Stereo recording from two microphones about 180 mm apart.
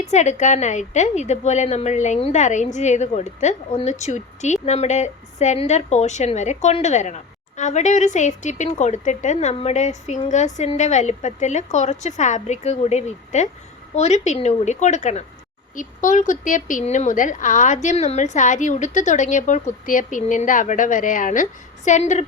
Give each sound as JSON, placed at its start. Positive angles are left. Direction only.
{"t": 0.0, "sound": "a woman's voice", "side_deg": 40}